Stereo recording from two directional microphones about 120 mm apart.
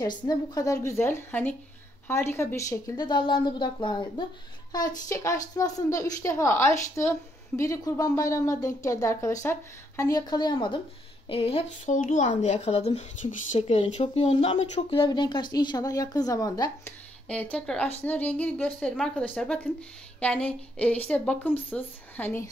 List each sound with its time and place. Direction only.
0.0 s speech: 35° left (ahead or behind)
0.8 s speech: 20° left (ahead or behind)
3.0 s speech: 40° left (ahead or behind)
11.2 s speech: 55° left (ahead or behind); by 16.7 s 35° left (ahead or behind)
17.3 s a woman's voice: 10° left (ahead or behind)